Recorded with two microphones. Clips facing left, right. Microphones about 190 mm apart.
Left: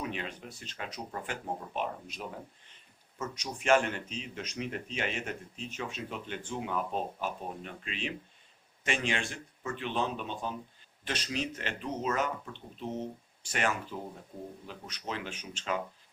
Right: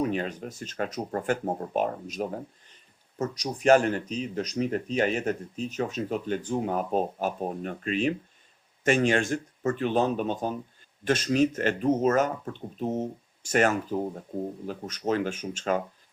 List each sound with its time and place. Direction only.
0.0 s speech: 40° right (ahead or behind)